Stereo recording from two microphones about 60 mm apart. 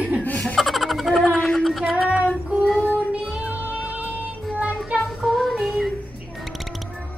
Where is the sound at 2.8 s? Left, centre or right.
Right.